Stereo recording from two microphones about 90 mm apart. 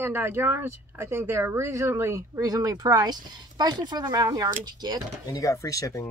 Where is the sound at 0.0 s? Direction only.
25° right (ahead or behind); by 4.9 s 40° right (ahead or behind).